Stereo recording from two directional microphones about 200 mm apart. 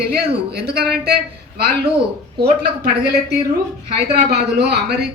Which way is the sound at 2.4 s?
50° right (ahead or behind).